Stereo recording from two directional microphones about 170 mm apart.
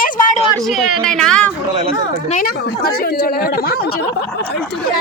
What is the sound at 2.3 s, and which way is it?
Speech, 60° left (ahead or behind).